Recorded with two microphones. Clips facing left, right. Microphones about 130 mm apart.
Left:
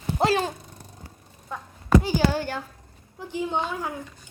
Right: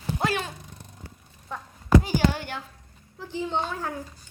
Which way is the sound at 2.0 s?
30° left (ahead or behind).